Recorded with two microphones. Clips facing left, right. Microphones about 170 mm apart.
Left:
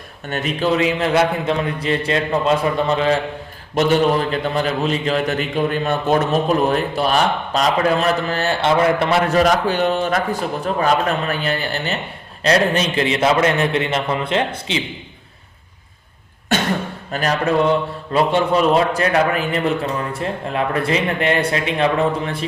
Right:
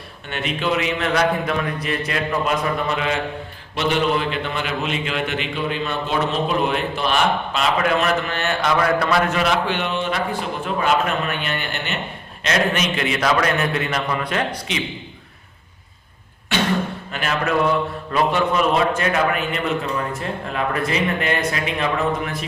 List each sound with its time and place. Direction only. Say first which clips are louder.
0.3 s a man's voice: left 4 dB; 40° left (ahead or behind)
3.8 s a man's voice: left 4 dB; 45° left (ahead or behind); by 9.2 s 25° left (ahead or behind)
9.3 s a man's voice: left 5 dB; 40° left (ahead or behind)
16.5 s beatboxing: left 2 dB; 45° left (ahead or behind)
17.1 s a man's voice: left 5 dB; 40° left (ahead or behind)